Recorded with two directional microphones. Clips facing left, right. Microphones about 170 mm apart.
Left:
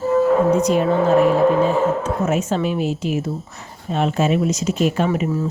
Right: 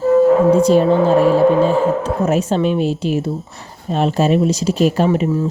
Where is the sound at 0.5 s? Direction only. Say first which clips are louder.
Right 5 dB; 30° right (ahead or behind).